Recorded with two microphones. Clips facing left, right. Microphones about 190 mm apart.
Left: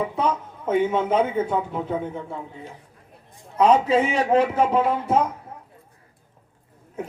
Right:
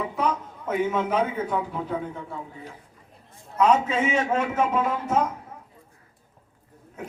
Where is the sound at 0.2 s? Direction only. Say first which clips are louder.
Left 2 dB; 25° left (ahead or behind).